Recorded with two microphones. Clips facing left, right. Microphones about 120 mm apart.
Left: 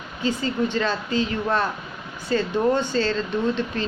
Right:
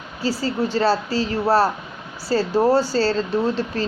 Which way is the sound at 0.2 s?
35° right (ahead or behind).